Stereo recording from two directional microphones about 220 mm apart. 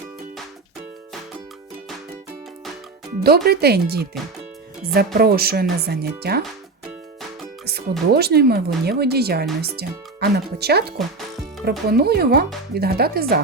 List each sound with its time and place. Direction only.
3.2 s speech: 45° right (ahead or behind)
7.6 s speech: 45° right (ahead or behind)